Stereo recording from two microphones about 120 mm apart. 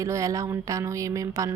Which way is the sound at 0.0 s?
25° right (ahead or behind).